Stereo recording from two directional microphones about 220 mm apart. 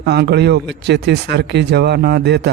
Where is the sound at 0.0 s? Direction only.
50° right (ahead or behind).